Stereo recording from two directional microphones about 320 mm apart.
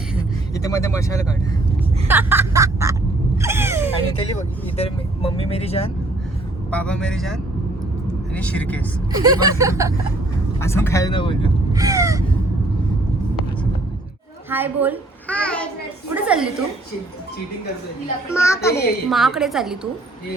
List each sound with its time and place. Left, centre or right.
0.5 s speech: centre
2.0 s snicker: centre
3.3 s a sound: centre
4.8 s speech: centre
6.7 s a woman's voice: centre
8.4 s a woman's voice: centre
9.1 s snicker: centre
10.6 s speech: centre
11.7 s snicker: centre
14.5 s a woman's voice: centre
16.1 s a sound: centre
18.3 s a woman's voice: centre